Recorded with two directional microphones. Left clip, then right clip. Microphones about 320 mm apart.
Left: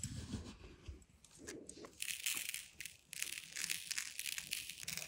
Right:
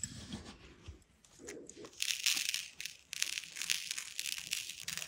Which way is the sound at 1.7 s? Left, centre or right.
Right.